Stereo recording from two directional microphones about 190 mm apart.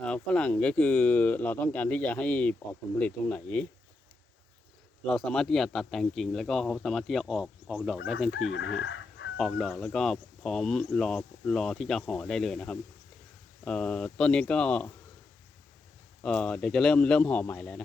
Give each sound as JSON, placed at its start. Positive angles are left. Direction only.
{"t": 0.0, "sound": "speech", "side_deg": 5}
{"t": 5.0, "sound": "speech", "side_deg": 0}
{"t": 8.4, "sound": "chicken", "side_deg": 90}
{"t": 8.8, "sound": "chicken", "side_deg": 75}
{"t": 9.4, "sound": "speech", "side_deg": 0}
{"t": 16.2, "sound": "speech", "side_deg": 5}